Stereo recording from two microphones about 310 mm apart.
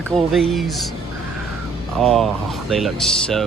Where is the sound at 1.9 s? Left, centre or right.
Centre.